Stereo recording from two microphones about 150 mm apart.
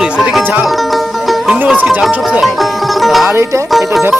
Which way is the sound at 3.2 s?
15° right (ahead or behind).